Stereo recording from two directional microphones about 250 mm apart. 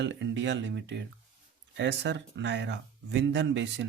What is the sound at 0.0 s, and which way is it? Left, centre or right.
Speech, right.